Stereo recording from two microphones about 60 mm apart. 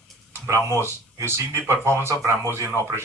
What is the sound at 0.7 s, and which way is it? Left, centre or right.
Speech, right.